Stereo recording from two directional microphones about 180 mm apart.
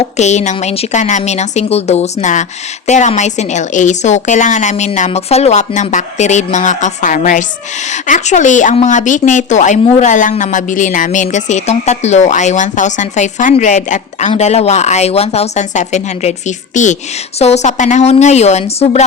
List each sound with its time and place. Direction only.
0.2 s a woman's voice: 40° left (ahead or behind)